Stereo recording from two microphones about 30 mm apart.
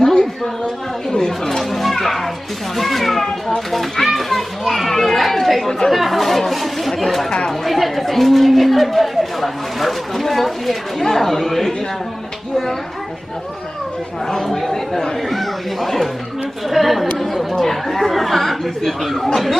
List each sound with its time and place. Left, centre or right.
0.0 s a sound: left
1.1 s speech: centre
1.6 s speech: centre
4.0 s children playing: centre
5.9 s speech: centre
14.2 s speech: centre
15.1 s speech: centre